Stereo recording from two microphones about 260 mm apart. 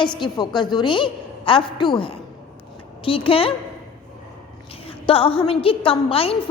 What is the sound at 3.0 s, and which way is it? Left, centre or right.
Speech, left.